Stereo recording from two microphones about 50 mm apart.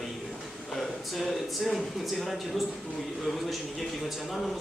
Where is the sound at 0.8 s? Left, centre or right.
Centre.